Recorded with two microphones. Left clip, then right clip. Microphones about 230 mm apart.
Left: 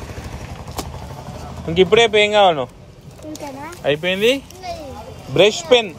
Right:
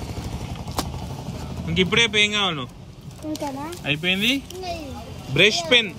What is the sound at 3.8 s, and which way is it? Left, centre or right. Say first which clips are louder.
Speech: left 6 dB; centre.